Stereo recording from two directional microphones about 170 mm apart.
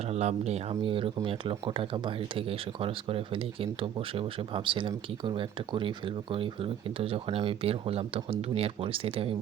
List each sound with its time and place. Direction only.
0.0 s speech: 40° right (ahead or behind)